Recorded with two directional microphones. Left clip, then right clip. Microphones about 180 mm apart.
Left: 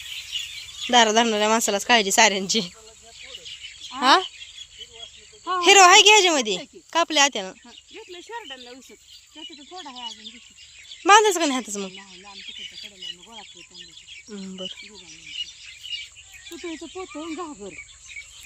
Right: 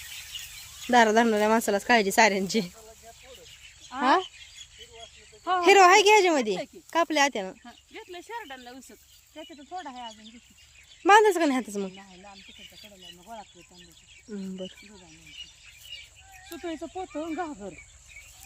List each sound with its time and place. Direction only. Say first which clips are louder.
0.3 s a sound: left 11 dB; 35° right (ahead or behind)
0.9 s speech: left 3 dB; 10° right (ahead or behind)
3.9 s speech: left 5 dB; centre (ahead or behind)
5.5 s speech: left 4 dB; 5° right (ahead or behind)
7.9 s speech: left 2 dB; 20° right (ahead or behind)
9.3 s speech: left 3 dB; 5° right (ahead or behind)
11.0 s speech: left 3 dB; 10° right (ahead or behind)
12.3 s speech: left 10 dB; 40° right (ahead or behind)
14.3 s speech: left 3 dB; 5° right (ahead or behind)
15.3 s bird: left 11 dB; 45° right (ahead or behind)
16.7 s speech: even; 45° right (ahead or behind)
17.3 s speech: even; 20° right (ahead or behind)